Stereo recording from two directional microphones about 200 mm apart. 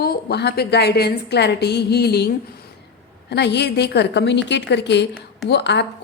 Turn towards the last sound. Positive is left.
turn(degrees=60)  # may be behind; listen again after turning